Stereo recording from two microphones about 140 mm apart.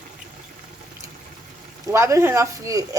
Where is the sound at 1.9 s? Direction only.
20° right (ahead or behind).